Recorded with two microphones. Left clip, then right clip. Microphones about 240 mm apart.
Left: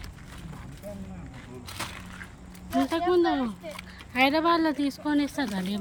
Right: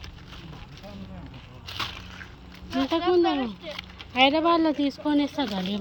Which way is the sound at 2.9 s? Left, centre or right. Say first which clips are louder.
Right 3 dB; centre.